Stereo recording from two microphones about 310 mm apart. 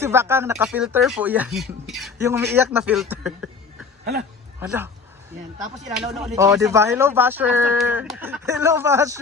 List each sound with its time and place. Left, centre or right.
0.0 s speech: centre
4.6 s speech: centre
6.1 s speech: centre